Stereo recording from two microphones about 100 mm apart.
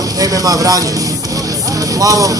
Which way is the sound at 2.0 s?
35° right (ahead or behind).